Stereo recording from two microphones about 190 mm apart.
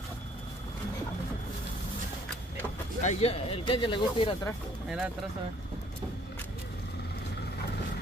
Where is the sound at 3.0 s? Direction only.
35° left (ahead or behind).